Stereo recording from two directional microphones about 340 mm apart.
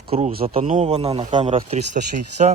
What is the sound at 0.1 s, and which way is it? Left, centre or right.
Speech, centre.